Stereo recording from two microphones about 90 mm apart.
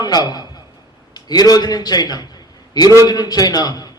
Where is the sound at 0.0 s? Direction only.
50° left (ahead or behind).